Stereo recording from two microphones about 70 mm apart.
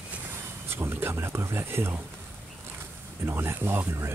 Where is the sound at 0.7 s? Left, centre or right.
Right.